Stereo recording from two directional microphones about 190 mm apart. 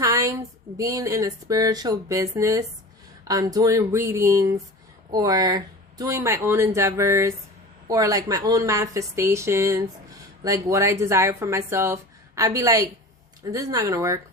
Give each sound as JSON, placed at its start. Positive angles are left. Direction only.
{"t": 0.0, "sound": "speech", "side_deg": -15}